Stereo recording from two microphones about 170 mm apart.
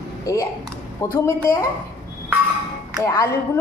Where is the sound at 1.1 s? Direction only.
20° left (ahead or behind).